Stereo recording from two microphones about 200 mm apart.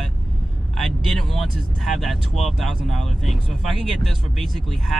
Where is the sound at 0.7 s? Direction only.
Centre (ahead or behind).